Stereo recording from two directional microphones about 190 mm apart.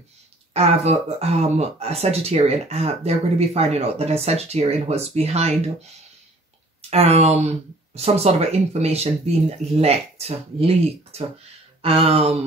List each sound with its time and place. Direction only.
0.5 s speech: 35° right (ahead or behind)
6.9 s speech: 30° right (ahead or behind)